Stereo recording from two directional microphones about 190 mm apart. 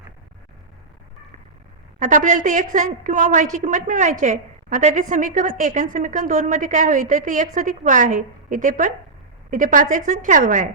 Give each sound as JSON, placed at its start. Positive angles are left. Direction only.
{"t": 2.0, "sound": "a woman's voice", "side_deg": -40}